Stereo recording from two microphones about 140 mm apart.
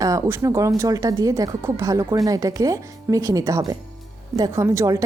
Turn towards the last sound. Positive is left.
turn(degrees=-20)  # may be behind; listen again after turning